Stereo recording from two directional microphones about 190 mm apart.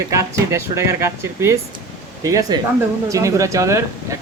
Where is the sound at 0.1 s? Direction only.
15° right (ahead or behind).